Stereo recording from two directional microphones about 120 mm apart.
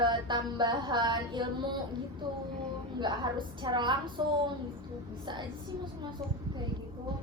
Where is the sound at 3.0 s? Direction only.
40° right (ahead or behind).